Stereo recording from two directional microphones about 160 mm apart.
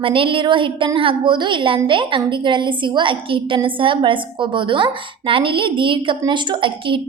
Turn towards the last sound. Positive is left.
turn(degrees=-30)  # may be behind; listen again after turning